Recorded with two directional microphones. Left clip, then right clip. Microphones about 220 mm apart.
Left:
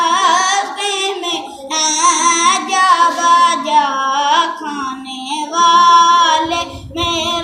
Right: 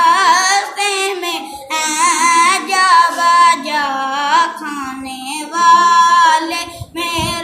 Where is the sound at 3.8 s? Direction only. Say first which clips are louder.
Left 4 dB; 20° right (ahead or behind).